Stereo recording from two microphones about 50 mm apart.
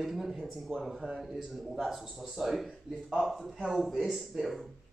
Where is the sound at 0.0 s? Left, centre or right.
Centre.